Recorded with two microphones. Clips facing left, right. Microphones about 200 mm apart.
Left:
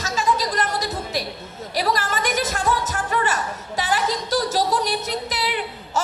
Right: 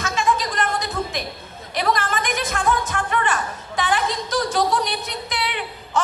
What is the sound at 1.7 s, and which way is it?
Music, 35° left (ahead or behind).